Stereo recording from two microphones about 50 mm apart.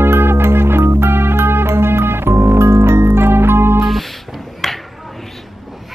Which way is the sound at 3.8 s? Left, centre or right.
Centre.